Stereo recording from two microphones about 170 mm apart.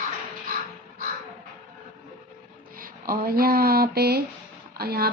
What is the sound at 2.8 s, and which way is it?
Speech, 60° right (ahead or behind).